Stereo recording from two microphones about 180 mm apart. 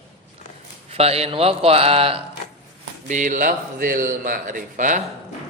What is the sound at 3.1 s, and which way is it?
Speech, 45° right (ahead or behind).